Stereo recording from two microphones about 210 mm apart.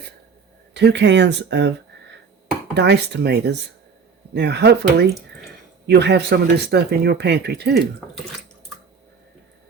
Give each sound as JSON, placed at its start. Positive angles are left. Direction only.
{"t": 0.7, "sound": "speech", "side_deg": -55}
{"t": 2.7, "sound": "speech", "side_deg": -55}